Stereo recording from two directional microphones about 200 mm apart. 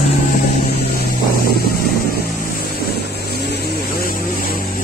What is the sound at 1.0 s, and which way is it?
Vehicle, 50° left (ahead or behind).